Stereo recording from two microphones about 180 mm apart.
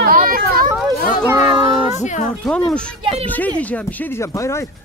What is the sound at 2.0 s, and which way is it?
Speech, 40° left (ahead or behind).